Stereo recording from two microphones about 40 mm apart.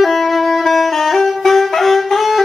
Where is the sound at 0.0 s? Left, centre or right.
Centre.